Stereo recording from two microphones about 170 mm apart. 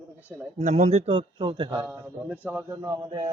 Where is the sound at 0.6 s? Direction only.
45° right (ahead or behind).